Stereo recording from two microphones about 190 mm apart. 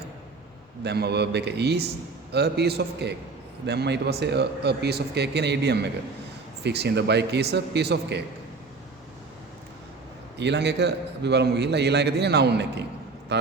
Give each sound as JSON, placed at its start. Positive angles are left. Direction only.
{"t": 0.9, "sound": "a man's voice", "side_deg": -60}
{"t": 10.3, "sound": "a man's voice", "side_deg": -65}